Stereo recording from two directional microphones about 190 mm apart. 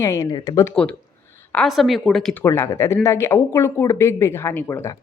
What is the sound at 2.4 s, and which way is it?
A woman's voice, 15° left (ahead or behind).